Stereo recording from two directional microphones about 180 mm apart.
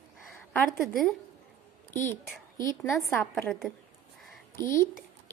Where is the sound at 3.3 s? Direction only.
Centre (ahead or behind).